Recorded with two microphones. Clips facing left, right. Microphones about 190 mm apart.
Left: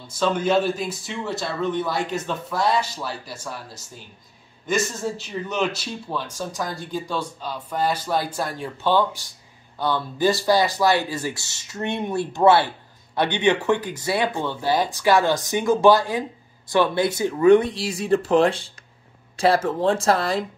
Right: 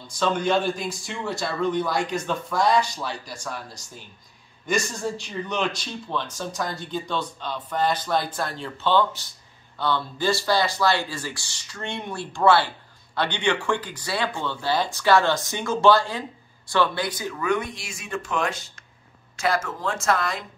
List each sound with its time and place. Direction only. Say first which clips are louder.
0.1 s speech: left 2 dB; 5° left (ahead or behind)
4.6 s speech: left 2 dB; 5° left (ahead or behind); by 20.4 s 30° left (ahead or behind)